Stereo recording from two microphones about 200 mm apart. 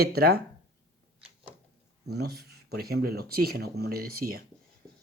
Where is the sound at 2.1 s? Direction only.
55° right (ahead or behind).